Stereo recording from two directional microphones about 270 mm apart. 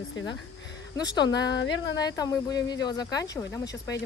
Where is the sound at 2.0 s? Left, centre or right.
Centre.